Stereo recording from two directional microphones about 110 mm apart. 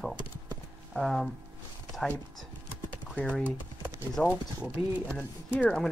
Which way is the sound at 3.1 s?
10° left (ahead or behind).